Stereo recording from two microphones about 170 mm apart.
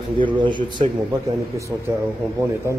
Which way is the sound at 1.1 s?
15° right (ahead or behind).